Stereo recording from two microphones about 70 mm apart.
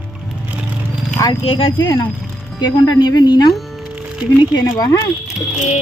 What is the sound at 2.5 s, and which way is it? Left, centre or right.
Speech, left.